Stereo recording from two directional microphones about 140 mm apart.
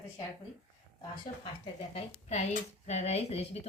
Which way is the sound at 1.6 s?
50° left (ahead or behind).